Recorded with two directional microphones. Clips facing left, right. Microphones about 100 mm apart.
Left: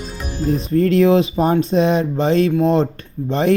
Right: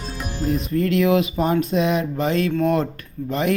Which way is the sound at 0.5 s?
35° left (ahead or behind).